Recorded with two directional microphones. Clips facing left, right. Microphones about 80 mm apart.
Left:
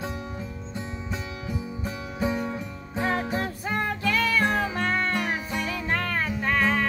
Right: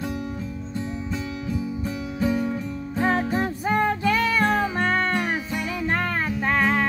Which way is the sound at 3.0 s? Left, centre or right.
Right.